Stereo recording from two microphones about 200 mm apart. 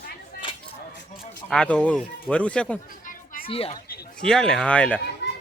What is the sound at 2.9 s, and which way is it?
Chatter, 45° left (ahead or behind).